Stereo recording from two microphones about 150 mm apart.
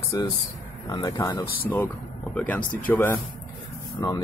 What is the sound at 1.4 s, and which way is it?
Speech, 85° left.